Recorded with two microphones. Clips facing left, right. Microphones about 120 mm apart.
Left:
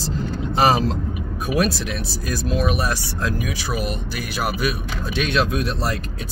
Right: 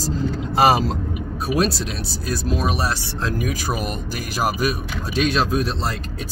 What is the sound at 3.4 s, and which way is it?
Speech, 45° right (ahead or behind).